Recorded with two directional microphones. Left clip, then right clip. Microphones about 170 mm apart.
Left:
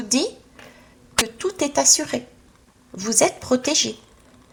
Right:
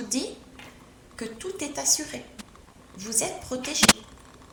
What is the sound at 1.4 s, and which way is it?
A woman's voice, 30° left (ahead or behind).